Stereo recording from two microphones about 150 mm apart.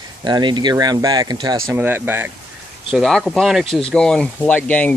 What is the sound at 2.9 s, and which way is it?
Speech, centre (ahead or behind).